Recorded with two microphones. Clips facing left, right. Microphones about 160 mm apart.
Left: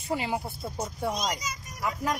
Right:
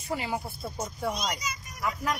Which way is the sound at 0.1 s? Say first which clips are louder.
Left 2 dB; 20° left (ahead or behind).